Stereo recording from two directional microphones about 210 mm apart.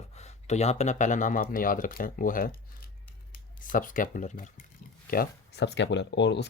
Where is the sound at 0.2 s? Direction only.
30° left (ahead or behind).